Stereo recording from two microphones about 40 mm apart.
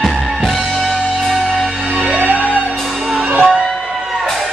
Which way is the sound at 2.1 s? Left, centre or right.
Right.